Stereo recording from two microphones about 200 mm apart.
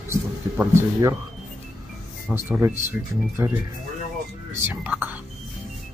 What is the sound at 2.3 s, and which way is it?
Speech, 5° right (ahead or behind).